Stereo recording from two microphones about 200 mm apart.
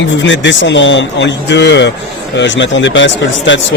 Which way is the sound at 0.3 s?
65° left (ahead or behind).